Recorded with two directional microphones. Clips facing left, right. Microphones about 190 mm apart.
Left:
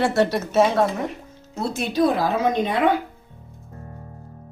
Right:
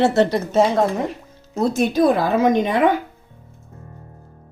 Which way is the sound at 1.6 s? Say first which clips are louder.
Right 4 dB; 45° right (ahead or behind).